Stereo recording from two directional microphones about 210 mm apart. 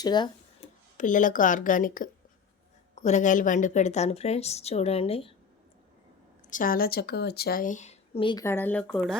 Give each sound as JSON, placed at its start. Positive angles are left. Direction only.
{"t": 0.0, "sound": "speech", "side_deg": 20}
{"t": 0.6, "sound": "a sound", "side_deg": 25}
{"t": 0.9, "sound": "speech", "side_deg": 40}
{"t": 6.5, "sound": "speech", "side_deg": 40}
{"t": 8.4, "sound": "speech", "side_deg": 10}